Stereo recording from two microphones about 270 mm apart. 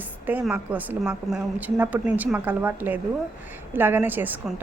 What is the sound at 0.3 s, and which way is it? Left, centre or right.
A woman's voice, centre.